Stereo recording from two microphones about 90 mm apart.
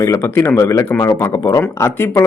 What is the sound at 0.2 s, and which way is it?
Speech, 25° left (ahead or behind).